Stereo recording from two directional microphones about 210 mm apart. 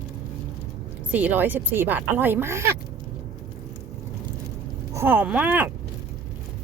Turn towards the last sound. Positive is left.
turn(degrees=-10)  # may be behind; listen again after turning